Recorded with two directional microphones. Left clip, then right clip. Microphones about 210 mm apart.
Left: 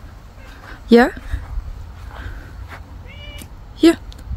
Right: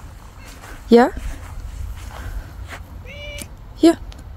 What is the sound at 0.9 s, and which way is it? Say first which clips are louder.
Speech: even; 15° left (ahead or behind).